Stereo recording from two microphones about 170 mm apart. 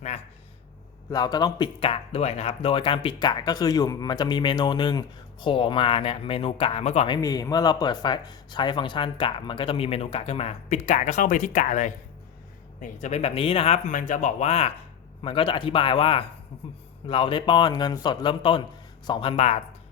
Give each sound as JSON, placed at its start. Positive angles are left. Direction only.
{"t": 1.1, "sound": "speech", "side_deg": 25}
{"t": 7.2, "sound": "speech", "side_deg": 20}